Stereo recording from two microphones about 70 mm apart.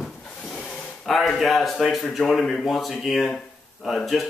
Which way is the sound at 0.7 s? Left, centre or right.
Centre.